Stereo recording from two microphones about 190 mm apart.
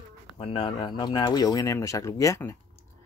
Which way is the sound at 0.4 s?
25° left (ahead or behind).